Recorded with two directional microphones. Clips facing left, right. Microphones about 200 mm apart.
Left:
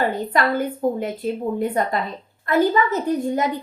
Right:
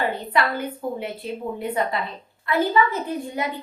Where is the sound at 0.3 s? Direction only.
45° left (ahead or behind).